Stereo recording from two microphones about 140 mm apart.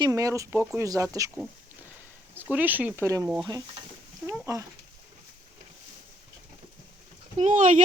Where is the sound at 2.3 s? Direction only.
10° right (ahead or behind).